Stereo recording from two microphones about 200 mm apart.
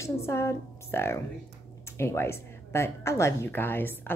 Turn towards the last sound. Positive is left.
turn(degrees=10)  # may be behind; listen again after turning